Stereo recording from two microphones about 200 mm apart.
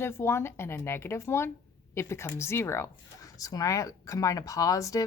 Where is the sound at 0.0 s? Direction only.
10° left (ahead or behind).